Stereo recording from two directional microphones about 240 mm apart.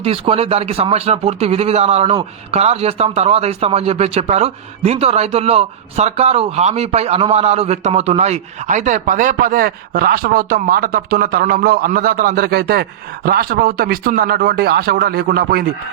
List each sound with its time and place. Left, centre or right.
0.0 s speech: right